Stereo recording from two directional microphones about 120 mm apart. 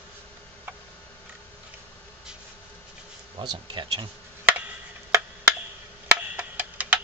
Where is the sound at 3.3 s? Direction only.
45° right (ahead or behind).